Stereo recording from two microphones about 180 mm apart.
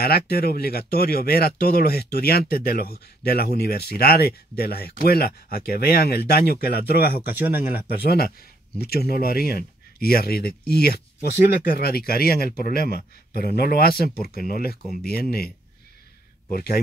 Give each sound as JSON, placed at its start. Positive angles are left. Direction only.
{"t": 0.0, "sound": "speech", "side_deg": 60}
{"t": 7.2, "sound": "speech", "side_deg": -10}
{"t": 8.7, "sound": "speech", "side_deg": 60}